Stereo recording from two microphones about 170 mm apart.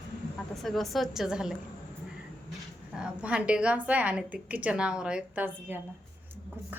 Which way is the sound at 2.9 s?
5° right (ahead or behind).